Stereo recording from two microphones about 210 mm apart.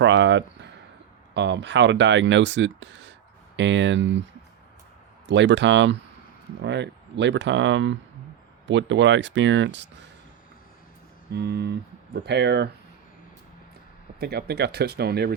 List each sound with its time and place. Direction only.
0.0 s speech: 60° right (ahead or behind)
11.3 s speech: 50° right (ahead or behind)
14.2 s speech: 50° right (ahead or behind)